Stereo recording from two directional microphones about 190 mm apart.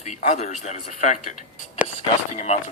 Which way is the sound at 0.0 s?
40° left (ahead or behind).